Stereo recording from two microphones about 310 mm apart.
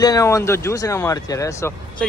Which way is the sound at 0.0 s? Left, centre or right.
Centre.